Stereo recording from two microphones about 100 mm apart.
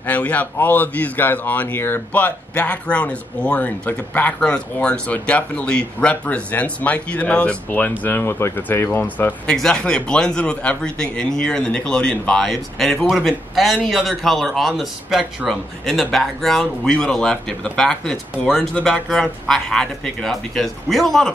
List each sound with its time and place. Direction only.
0.0 s a man's voice: 15° left (ahead or behind)
9.5 s a man's voice: 5° left (ahead or behind)